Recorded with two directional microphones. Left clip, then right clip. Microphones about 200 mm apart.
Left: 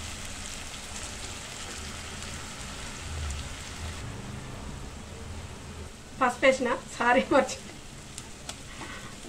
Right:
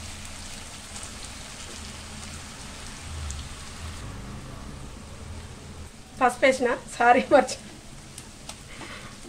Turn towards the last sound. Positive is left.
turn(degrees=-35)  # may be behind; listen again after turning